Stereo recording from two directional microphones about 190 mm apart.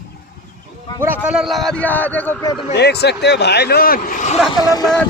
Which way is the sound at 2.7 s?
60° left (ahead or behind).